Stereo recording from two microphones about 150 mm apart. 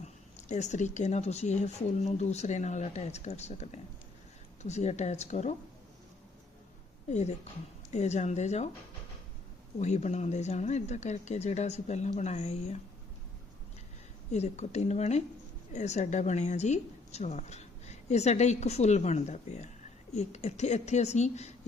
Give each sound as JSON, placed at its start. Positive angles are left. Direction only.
{"t": 0.0, "sound": "speech", "side_deg": 50}
{"t": 7.1, "sound": "speech", "side_deg": 50}
{"t": 9.7, "sound": "speech", "side_deg": 50}
{"t": 14.3, "sound": "speech", "side_deg": 50}